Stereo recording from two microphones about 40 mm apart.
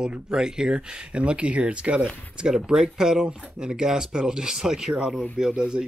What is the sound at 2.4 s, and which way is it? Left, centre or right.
Speech, centre.